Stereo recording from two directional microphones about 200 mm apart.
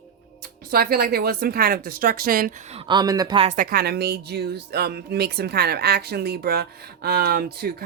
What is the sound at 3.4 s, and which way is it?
Speech, 45° right (ahead or behind).